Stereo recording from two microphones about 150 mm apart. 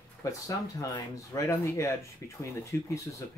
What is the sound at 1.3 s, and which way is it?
Speech, 20° left (ahead or behind).